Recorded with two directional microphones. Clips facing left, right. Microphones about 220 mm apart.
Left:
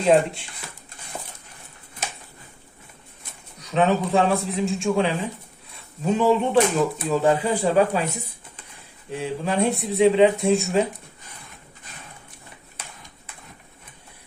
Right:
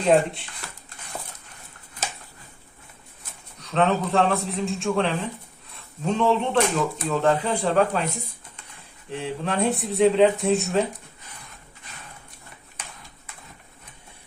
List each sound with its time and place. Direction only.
0.0 s speech: centre (ahead or behind)
3.6 s speech: centre (ahead or behind)
9.0 s speech: 5° left (ahead or behind)